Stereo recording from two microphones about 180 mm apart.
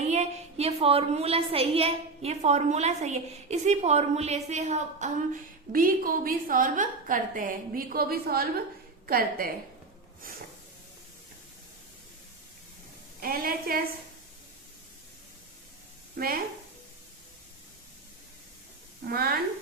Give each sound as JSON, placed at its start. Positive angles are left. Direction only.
{"t": 0.1, "sound": "a woman's voice", "side_deg": -35}
{"t": 10.3, "sound": "hiss", "side_deg": -50}
{"t": 13.2, "sound": "a woman's voice", "side_deg": -55}
{"t": 16.2, "sound": "a woman's voice", "side_deg": -55}
{"t": 19.0, "sound": "a woman's voice", "side_deg": -55}